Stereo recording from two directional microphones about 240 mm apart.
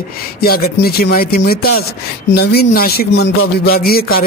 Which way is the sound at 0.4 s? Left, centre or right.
Left.